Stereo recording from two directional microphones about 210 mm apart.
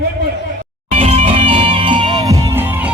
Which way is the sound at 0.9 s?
30° right (ahead or behind).